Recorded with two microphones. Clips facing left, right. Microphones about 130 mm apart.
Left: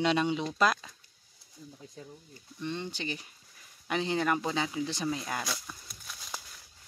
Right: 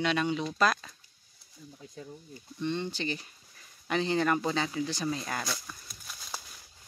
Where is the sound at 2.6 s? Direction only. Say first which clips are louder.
Right 4 dB; 10° left (ahead or behind).